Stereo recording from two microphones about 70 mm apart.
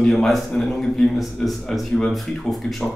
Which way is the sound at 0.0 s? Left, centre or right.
Centre.